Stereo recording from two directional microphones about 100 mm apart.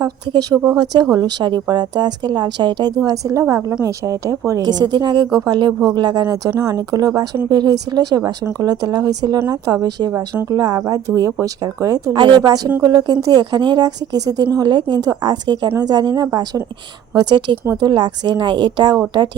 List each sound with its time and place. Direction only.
0.0 s a woman's voice: 40° right (ahead or behind)